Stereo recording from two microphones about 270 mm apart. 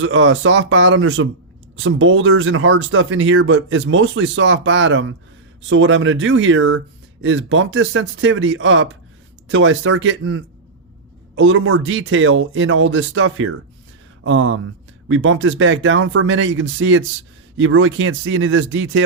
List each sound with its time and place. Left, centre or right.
0.0 s speech: right